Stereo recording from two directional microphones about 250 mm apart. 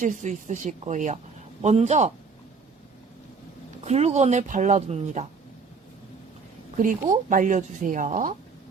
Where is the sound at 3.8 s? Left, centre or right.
Right.